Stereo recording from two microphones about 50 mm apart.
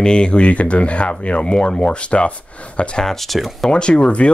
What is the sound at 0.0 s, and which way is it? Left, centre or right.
Speech, centre.